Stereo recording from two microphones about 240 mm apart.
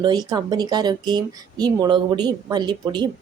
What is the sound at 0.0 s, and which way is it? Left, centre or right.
Speech, centre.